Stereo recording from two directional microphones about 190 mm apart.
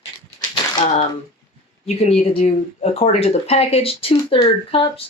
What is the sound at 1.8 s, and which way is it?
Speech, 35° left (ahead or behind).